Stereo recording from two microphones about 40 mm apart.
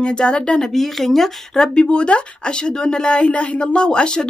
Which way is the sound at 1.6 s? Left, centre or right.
Left.